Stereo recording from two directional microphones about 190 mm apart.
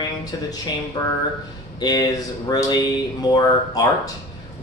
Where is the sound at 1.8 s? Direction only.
20° left (ahead or behind).